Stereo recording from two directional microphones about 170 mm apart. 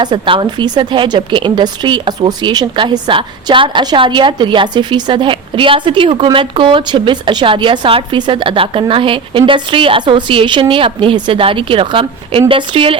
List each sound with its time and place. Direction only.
0.0 s a woman's voice: 30° right (ahead or behind)